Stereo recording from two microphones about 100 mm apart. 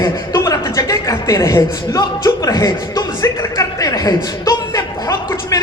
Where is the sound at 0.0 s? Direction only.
35° left (ahead or behind).